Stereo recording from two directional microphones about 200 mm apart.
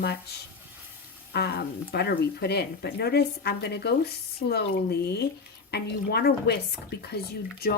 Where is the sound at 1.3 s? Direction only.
55° left (ahead or behind).